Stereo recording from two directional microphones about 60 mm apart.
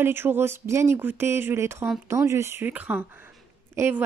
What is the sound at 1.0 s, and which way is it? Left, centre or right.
Speech, right.